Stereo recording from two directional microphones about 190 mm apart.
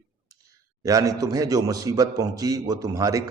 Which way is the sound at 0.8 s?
20° right (ahead or behind).